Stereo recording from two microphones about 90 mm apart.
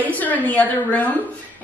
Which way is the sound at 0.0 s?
20° left (ahead or behind).